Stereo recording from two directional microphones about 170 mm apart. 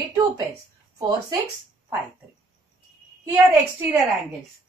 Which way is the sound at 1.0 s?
25° right (ahead or behind).